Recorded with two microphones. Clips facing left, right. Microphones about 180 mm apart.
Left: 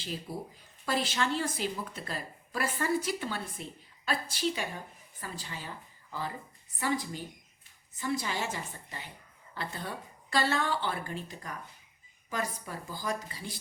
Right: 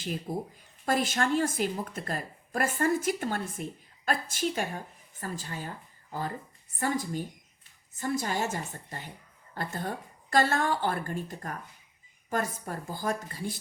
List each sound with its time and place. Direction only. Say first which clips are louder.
0.0 s a woman's voice: right 5 dB; 50° right (ahead or behind)